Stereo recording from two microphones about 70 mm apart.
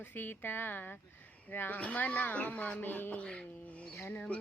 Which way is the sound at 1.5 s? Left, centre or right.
Left.